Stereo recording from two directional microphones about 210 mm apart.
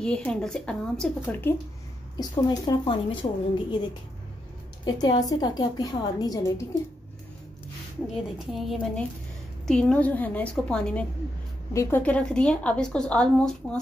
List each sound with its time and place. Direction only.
0.0 s a woman's voice: 5° left (ahead or behind)
2.1 s a woman's voice: 20° left (ahead or behind)
4.8 s a woman's voice: 20° left (ahead or behind)
8.4 s a woman's voice: centre (ahead or behind)